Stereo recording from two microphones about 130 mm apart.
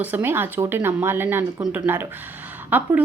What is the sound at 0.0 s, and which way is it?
A woman's voice, 15° right (ahead or behind).